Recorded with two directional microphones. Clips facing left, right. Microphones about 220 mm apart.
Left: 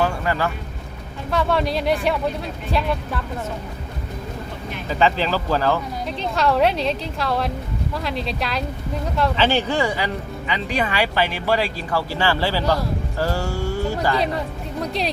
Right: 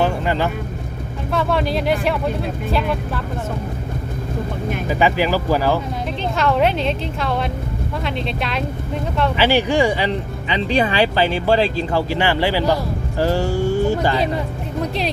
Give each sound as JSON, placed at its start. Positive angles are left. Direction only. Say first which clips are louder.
{"t": 0.0, "sound": "vehicle", "louder": "right 3 dB", "side_deg": -20}
{"t": 1.3, "sound": "a woman's voice", "louder": "right 1 dB", "side_deg": 0}
{"t": 4.9, "sound": "speech", "louder": "right 2 dB", "side_deg": -10}
{"t": 6.1, "sound": "a woman's voice", "louder": "right 1 dB", "side_deg": 0}
{"t": 9.3, "sound": "speech", "louder": "right 5 dB", "side_deg": -15}
{"t": 14.3, "sound": "a woman's voice", "louder": "right 3 dB", "side_deg": 0}